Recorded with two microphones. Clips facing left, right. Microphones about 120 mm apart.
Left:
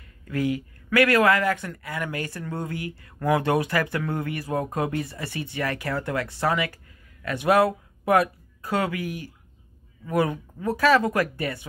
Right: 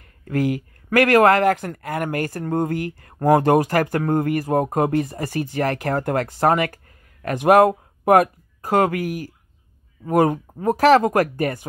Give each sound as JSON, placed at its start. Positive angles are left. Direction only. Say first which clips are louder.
{"t": 0.3, "sound": "speech", "louder": "right 4 dB", "side_deg": -50}